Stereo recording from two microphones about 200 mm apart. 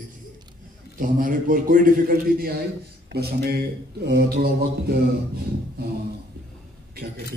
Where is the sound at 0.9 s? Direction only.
45° right (ahead or behind).